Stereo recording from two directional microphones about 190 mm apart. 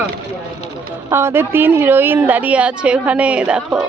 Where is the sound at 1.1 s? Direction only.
15° right (ahead or behind).